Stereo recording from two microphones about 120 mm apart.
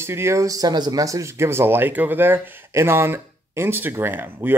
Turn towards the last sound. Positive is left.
turn(degrees=-15)  # may be behind; listen again after turning